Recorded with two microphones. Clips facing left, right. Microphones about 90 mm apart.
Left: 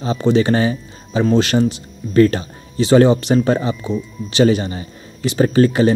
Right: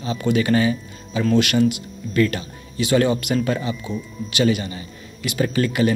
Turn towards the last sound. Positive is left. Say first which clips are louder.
# left 6 dB
turn(degrees=35)  # may be behind; listen again after turning